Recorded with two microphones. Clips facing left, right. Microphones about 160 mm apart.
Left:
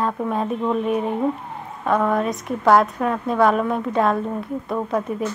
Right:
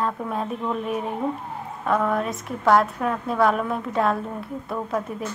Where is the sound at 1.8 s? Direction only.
Centre (ahead or behind).